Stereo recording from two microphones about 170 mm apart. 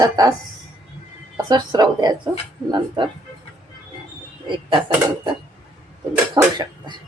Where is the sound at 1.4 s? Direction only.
25° right (ahead or behind).